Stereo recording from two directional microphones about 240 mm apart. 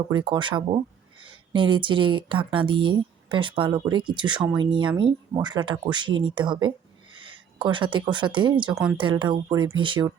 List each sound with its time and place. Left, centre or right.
0.1 s a woman's voice: centre
8.7 s speech: centre
9.0 s a woman's voice: centre